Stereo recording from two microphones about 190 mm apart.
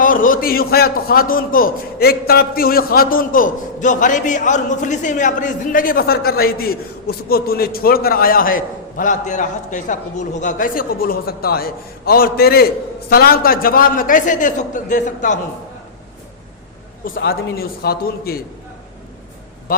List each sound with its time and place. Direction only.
0.0 s a man's voice: 45° left (ahead or behind)
17.2 s a man's voice: 55° left (ahead or behind)